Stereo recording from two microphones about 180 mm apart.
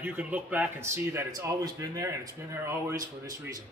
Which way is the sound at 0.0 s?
10° right (ahead or behind).